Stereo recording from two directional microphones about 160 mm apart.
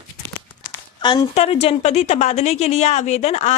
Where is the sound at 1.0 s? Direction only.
30° left (ahead or behind).